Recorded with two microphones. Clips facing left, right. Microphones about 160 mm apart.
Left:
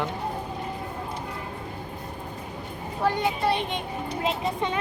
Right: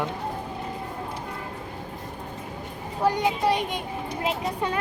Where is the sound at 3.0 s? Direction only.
15° right (ahead or behind).